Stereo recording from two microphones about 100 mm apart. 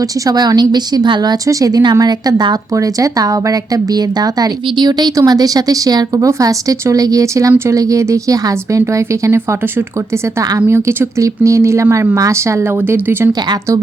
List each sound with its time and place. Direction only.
0.3 s a woman's voice: 45° right (ahead or behind); by 13.3 s 20° right (ahead or behind)